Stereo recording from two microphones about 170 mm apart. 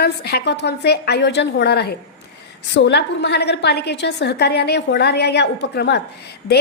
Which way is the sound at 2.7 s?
90° left.